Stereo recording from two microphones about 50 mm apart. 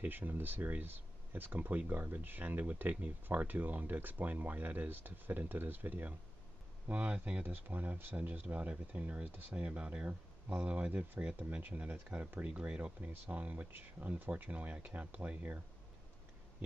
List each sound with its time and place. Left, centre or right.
0.1 s speech: right
7.5 s speech: right
11.0 s speech: right
11.3 s speech: right